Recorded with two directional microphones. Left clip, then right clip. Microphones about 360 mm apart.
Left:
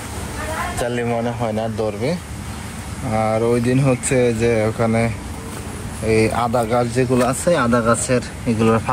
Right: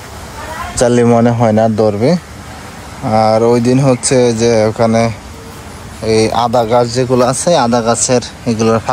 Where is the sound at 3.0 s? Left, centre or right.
Centre.